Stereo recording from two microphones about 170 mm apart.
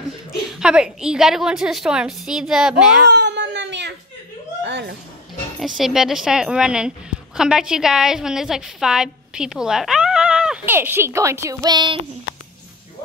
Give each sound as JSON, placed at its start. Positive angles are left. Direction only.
{"t": 0.5, "sound": "a woman's voice", "side_deg": -5}
{"t": 3.1, "sound": "crying", "side_deg": -90}
{"t": 4.6, "sound": "a sound", "side_deg": -90}
{"t": 5.8, "sound": "a woman's voice", "side_deg": 0}